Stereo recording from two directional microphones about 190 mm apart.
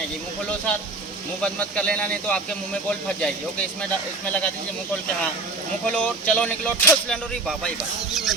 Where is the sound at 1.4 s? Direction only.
5° left (ahead or behind).